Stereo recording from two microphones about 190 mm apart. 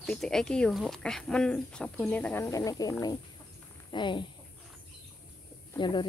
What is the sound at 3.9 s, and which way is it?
Speech, 25° left (ahead or behind).